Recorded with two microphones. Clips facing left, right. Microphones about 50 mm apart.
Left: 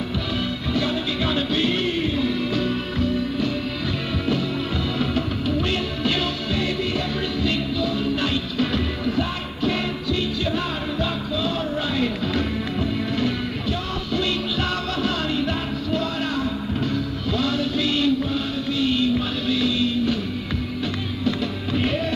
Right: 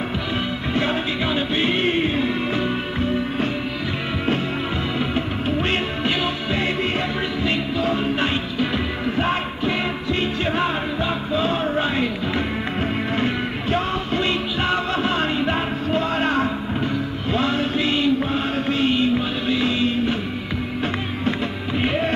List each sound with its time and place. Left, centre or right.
0.7 s music: right
6.0 s music: right
10.4 s music: right
21.7 s music: right